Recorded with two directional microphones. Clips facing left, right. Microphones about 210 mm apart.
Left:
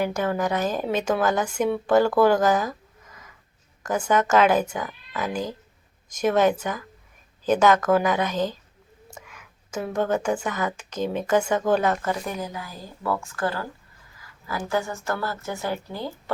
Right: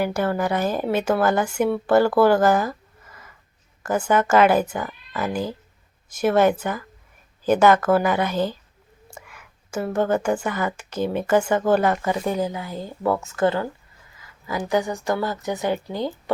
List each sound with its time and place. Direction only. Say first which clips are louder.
0.0 s a woman's voice: right 2 dB; 10° right (ahead or behind)
9.2 s a sound: right 1 dB; 5° right (ahead or behind)
10.2 s a woman's voice: right 2 dB; 5° right (ahead or behind)
12.2 s a woman's voice: right 7 dB; 30° right (ahead or behind)